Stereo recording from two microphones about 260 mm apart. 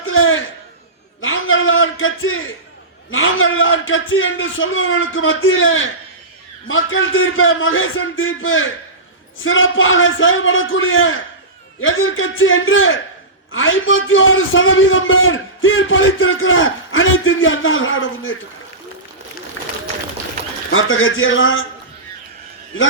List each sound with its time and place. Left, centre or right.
0.0 s a sound: left
3.1 s a man's voice: left
19.6 s run: left
20.7 s a man's voice: left